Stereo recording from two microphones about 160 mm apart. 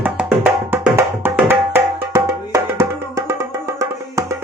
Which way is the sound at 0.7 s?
15° right (ahead or behind).